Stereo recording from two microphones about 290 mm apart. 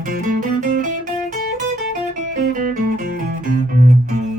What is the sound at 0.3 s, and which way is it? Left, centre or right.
Music, right.